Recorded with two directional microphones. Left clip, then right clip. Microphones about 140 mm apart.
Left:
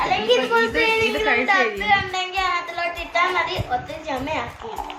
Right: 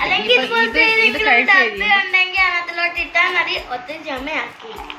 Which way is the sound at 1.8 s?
40° left (ahead or behind).